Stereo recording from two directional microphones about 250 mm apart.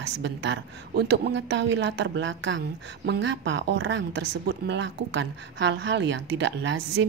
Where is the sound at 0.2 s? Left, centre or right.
Right.